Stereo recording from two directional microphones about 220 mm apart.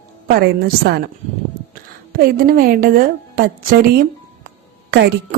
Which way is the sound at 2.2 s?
40° right (ahead or behind).